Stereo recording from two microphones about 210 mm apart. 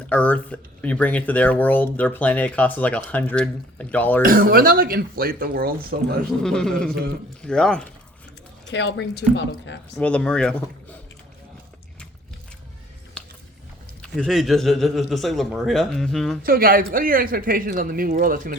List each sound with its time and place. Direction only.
0.1 s speech: 5° left (ahead or behind)
4.2 s a man's voice: 45° right (ahead or behind)
6.4 s a man's voice: 5° left (ahead or behind)
8.6 s speech: 55° left (ahead or behind)
10.0 s a man's voice: 5° left (ahead or behind)
14.0 s a man's voice: centre (ahead or behind)
16.4 s a man's voice: 45° right (ahead or behind)